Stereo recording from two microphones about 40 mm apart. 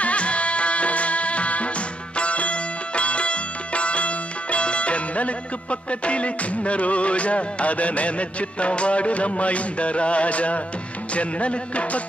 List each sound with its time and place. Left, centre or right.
0.0 s music: left